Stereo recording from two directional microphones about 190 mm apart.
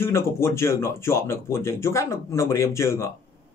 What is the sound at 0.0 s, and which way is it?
Speech, 15° left (ahead or behind).